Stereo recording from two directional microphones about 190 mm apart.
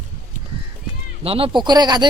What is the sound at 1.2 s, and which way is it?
Speech, 30° right (ahead or behind).